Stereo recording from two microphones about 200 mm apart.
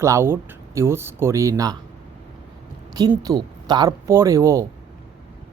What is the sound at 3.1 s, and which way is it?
Speech, 15° right (ahead or behind).